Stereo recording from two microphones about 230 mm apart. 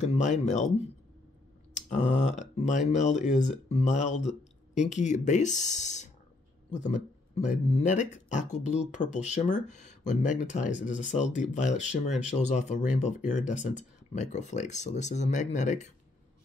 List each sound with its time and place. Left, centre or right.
0.0 s speech: left